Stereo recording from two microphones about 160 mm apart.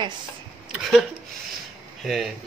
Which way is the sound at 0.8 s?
Centre (ahead or behind).